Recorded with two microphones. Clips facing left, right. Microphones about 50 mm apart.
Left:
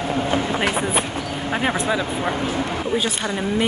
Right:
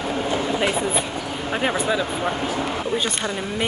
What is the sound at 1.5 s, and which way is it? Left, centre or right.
Speech, centre.